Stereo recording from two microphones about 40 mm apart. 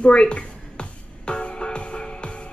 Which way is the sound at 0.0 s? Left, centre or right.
Left.